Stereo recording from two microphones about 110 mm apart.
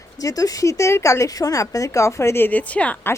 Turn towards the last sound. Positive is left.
turn(degrees=15)  # may be behind; listen again after turning